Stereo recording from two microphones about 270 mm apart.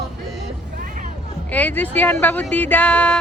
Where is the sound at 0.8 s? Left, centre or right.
Right.